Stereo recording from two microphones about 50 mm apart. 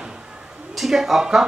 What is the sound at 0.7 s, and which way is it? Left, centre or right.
Speech, centre.